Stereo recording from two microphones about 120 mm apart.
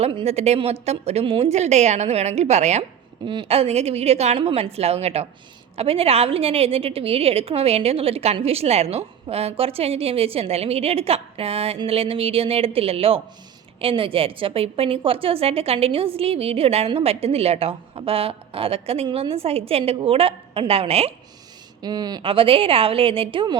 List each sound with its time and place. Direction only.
0.3 s a woman's voice: 65° right (ahead or behind)
1.5 s a woman's voice: 70° right (ahead or behind)
21.8 s speech: 35° right (ahead or behind)
22.2 s a woman's voice: 50° right (ahead or behind)